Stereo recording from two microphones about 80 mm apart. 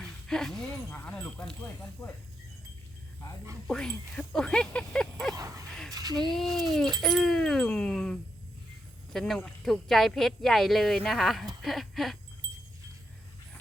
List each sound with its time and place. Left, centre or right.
0.0 s a sound: centre
0.9 s speech: left
3.7 s speech: centre
5.3 s speech: right
5.6 s speech: centre
5.9 s speech: right
6.1 s speech: centre
11.6 s a sound: centre
12.4 s a sound: right